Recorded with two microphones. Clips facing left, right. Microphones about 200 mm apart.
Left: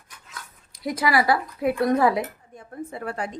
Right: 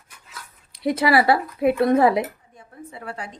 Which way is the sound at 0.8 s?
25° right (ahead or behind).